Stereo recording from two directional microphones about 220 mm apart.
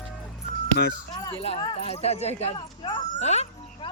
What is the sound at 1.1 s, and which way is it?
A child's voice, 20° left (ahead or behind).